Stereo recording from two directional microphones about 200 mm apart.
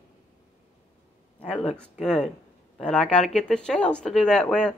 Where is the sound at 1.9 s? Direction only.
5° left (ahead or behind).